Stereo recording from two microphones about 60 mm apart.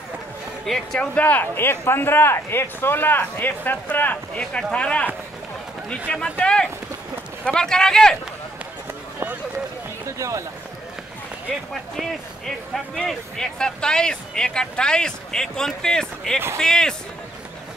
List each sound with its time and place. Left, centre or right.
0.9 s speech: left
4.4 s speech: centre
10.0 s speech: right
12.0 s speech: centre